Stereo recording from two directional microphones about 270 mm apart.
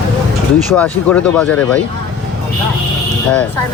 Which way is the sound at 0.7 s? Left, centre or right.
Centre.